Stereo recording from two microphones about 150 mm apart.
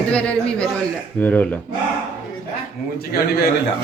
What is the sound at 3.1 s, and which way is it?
Speech, 90° left.